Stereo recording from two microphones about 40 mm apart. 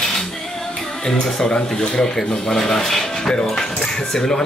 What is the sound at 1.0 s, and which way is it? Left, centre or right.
Speech, centre.